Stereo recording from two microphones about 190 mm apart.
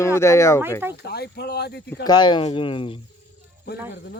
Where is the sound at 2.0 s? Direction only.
25° left (ahead or behind).